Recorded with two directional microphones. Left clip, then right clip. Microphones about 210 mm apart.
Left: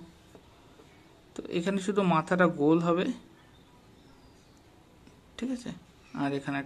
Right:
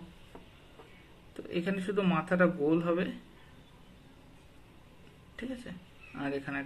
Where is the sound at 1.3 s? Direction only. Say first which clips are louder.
Left 3 dB; 40° left (ahead or behind).